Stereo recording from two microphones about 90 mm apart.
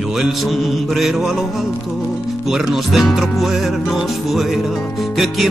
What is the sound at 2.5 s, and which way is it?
Speech, 5° right (ahead or behind).